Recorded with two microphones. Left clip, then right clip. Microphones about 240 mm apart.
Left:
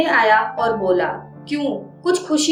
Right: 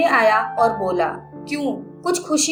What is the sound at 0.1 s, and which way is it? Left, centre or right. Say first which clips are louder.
A woman's voice: left 1 dB; right.